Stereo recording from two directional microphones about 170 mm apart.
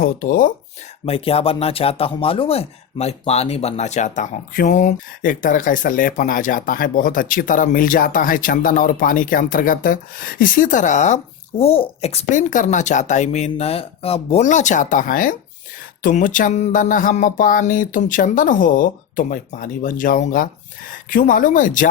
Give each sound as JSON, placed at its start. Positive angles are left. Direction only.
{"t": 0.0, "sound": "speech", "side_deg": 55}
{"t": 1.0, "sound": "speech", "side_deg": 35}